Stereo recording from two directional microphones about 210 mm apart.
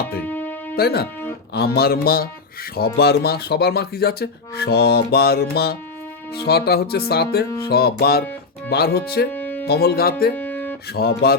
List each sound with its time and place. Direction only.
0.2 s music: 10° left (ahead or behind)
0.8 s speech: 50° left (ahead or behind)
9.3 s music: 10° left (ahead or behind)
9.6 s speech: 50° left (ahead or behind)
10.3 s music: 10° left (ahead or behind)
10.8 s speech: 50° left (ahead or behind)